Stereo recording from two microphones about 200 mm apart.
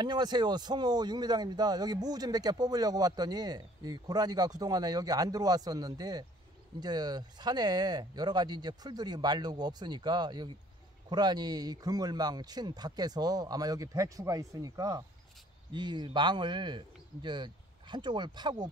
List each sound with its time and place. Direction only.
0.0 s speech: 20° right (ahead or behind)